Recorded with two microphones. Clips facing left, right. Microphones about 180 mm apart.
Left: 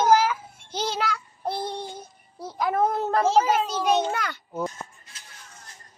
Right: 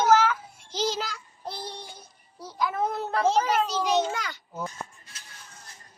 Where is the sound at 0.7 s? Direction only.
60° left (ahead or behind).